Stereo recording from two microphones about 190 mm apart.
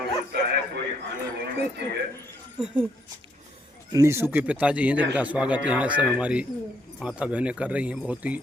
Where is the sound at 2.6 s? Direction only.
Centre (ahead or behind).